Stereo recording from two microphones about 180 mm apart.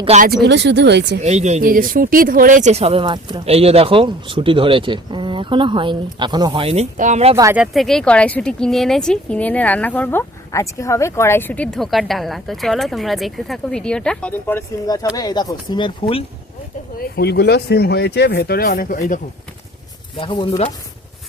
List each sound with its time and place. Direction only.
0.0 s speech: 35° right (ahead or behind)
0.4 s speech: 75° right (ahead or behind)
1.2 s speech: 40° right (ahead or behind)
7.5 s speech: centre (ahead or behind); by 16.2 s 30° left (ahead or behind)
17.2 s speech: 65° left (ahead or behind)
20.1 s speech: 25° left (ahead or behind)